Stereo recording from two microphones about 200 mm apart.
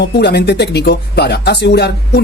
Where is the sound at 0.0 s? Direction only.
55° left (ahead or behind).